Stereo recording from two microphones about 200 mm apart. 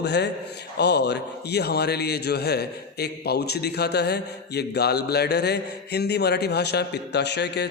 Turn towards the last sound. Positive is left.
turn(degrees=55)  # may be behind; listen again after turning